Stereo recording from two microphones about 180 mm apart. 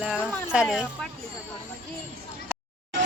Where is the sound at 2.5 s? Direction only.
10° right (ahead or behind).